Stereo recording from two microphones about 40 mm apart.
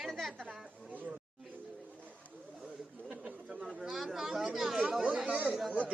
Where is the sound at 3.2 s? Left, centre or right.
Right.